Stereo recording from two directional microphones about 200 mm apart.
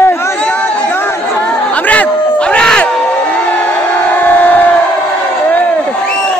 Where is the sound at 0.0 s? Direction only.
10° left (ahead or behind).